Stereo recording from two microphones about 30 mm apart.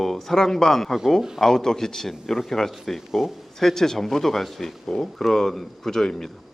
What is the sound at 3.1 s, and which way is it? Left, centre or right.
Speech, centre.